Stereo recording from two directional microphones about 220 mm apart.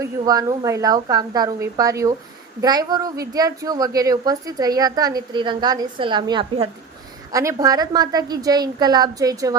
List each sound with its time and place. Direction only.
0.0 s a woman's voice: 15° right (ahead or behind)